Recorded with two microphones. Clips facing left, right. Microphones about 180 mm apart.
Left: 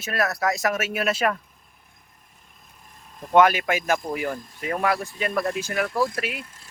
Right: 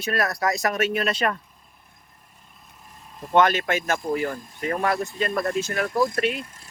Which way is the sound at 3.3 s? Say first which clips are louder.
Left 2 dB; 10° left (ahead or behind).